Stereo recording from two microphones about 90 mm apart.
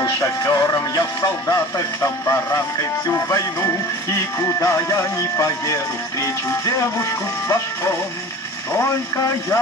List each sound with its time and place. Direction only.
0.2 s music: 35° left (ahead or behind)